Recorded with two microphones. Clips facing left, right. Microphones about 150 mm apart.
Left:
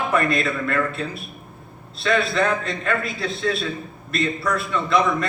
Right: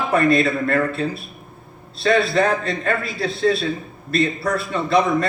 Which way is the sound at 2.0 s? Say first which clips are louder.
Right 3 dB; 30° right (ahead or behind).